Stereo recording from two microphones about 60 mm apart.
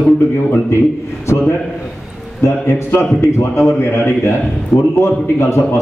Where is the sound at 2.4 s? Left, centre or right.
Left.